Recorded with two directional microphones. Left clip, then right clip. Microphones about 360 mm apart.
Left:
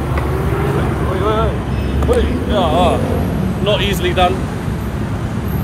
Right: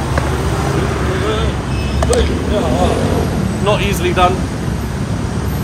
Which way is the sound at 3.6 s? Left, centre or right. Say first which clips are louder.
Even; centre.